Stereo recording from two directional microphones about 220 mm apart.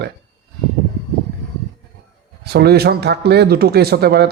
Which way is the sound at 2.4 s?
45° right (ahead or behind).